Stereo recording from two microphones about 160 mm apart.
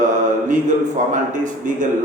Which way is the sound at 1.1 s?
55° right (ahead or behind).